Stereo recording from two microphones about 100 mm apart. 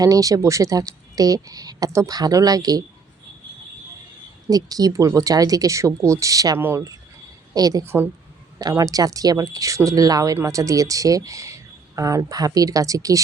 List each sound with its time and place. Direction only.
0.0 s speech: 35° right (ahead or behind)
4.4 s speech: 40° right (ahead or behind)
7.9 s speech: 20° right (ahead or behind)
8.8 s speech: 35° right (ahead or behind)